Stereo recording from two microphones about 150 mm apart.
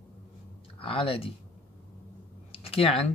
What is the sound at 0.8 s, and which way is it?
Speech, 40° left (ahead or behind).